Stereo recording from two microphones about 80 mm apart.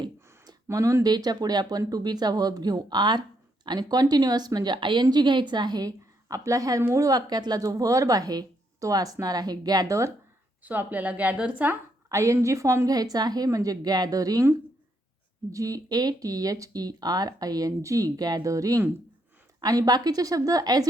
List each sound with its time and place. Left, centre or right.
0.7 s speech: right
1.0 s speech: right
5.0 s speech: right
10.6 s a woman's voice: right
12.0 s speech: right
15.5 s speech: right